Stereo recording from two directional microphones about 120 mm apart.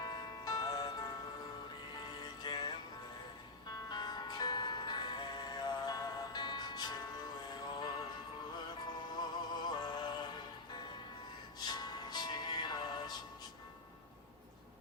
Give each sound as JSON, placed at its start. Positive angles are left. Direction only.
{"t": 0.0, "sound": "music", "side_deg": 35}
{"t": 2.4, "sound": "music", "side_deg": 40}
{"t": 3.8, "sound": "music", "side_deg": 35}
{"t": 9.2, "sound": "music", "side_deg": 35}
{"t": 11.7, "sound": "music", "side_deg": 35}